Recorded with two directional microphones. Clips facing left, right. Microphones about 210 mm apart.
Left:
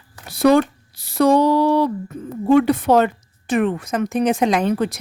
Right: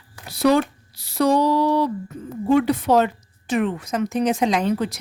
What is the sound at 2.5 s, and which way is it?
A woman's voice, 55° left (ahead or behind).